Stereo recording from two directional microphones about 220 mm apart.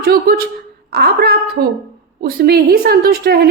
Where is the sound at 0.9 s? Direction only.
45° right (ahead or behind).